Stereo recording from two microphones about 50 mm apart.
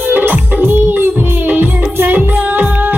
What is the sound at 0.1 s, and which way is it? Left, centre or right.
Music, right.